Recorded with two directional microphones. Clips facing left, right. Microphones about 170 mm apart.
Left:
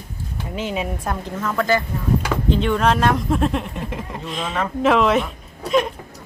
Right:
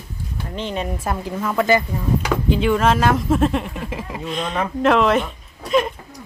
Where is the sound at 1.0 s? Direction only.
5° right (ahead or behind).